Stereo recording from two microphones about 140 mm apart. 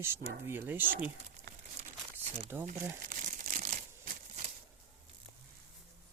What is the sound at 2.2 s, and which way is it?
Crumpling, 50° right (ahead or behind).